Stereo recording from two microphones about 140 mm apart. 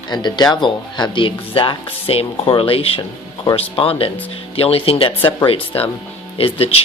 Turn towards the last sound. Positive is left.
turn(degrees=45)  # may be behind; listen again after turning